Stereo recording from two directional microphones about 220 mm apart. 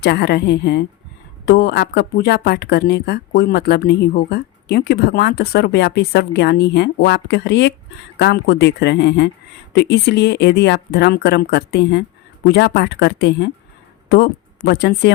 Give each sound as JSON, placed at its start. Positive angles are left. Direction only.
{"t": 0.0, "sound": "speech", "side_deg": 50}